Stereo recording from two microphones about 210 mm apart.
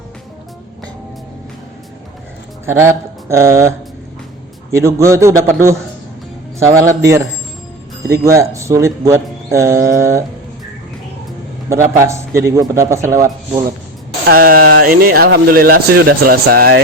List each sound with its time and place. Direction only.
2.6 s mantra: 10° right (ahead or behind)
4.7 s speech: 15° right (ahead or behind)
8.2 s speech: 15° right (ahead or behind)
11.7 s speech: 15° right (ahead or behind)
14.3 s speech: 45° right (ahead or behind)